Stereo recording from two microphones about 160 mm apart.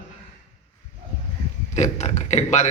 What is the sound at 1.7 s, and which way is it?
Speech, 45° left (ahead or behind).